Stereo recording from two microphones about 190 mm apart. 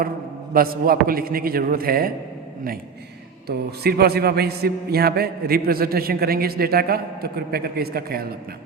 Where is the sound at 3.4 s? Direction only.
55° right (ahead or behind).